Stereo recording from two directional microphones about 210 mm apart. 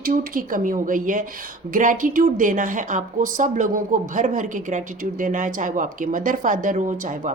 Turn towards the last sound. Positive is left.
turn(degrees=-35)  # may be behind; listen again after turning